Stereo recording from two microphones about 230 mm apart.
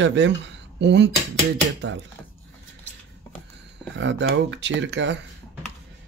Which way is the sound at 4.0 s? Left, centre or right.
Right.